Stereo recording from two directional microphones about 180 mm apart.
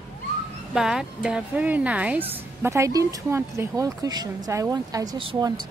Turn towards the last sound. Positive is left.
turn(degrees=-25)  # may be behind; listen again after turning